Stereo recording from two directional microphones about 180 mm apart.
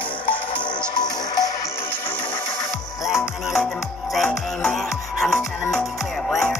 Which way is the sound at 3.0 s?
Centre (ahead or behind).